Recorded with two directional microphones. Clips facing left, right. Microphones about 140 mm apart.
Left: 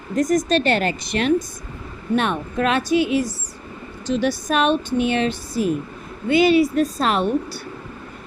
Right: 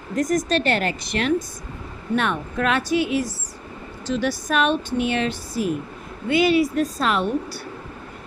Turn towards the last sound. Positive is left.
turn(degrees=25)  # may be behind; listen again after turning